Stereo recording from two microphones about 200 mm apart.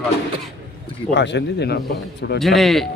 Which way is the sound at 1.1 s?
60° left (ahead or behind).